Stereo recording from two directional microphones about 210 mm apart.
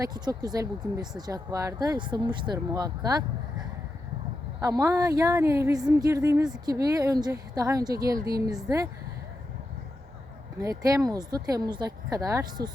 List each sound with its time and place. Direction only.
0.0 s speech: 20° right (ahead or behind)
4.6 s speech: 15° right (ahead or behind)
10.6 s speech: 15° right (ahead or behind)